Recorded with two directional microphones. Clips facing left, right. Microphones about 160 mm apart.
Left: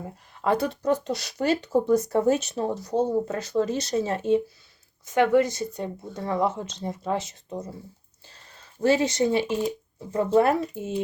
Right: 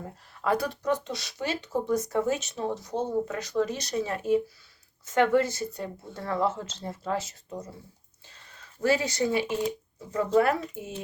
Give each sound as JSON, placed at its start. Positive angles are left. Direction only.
{"t": 0.4, "sound": "speech", "side_deg": 25}
{"t": 5.0, "sound": "speech", "side_deg": 15}
{"t": 8.3, "sound": "a sound", "side_deg": 30}
{"t": 10.3, "sound": "speech", "side_deg": 25}